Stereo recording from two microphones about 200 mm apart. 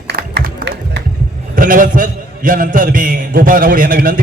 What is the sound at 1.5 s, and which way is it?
A man's voice, 40° right (ahead or behind).